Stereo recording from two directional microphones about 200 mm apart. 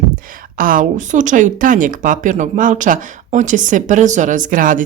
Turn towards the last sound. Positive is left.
turn(degrees=-40)  # may be behind; listen again after turning